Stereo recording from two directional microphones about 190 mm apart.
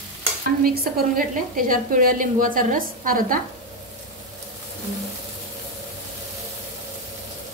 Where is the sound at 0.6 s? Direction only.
50° right (ahead or behind).